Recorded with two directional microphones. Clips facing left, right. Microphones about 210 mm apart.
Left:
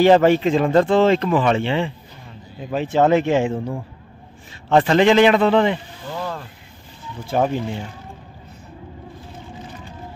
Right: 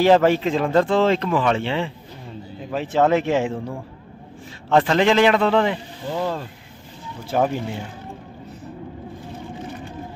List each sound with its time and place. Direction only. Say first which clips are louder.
0.0 s speech: left 2 dB; centre (ahead or behind)
4.6 s speech: left 3 dB; centre (ahead or behind)
6.1 s a sound: right 4 dB; 25° right (ahead or behind)
7.2 s speech: left 1 dB; 5° right (ahead or behind)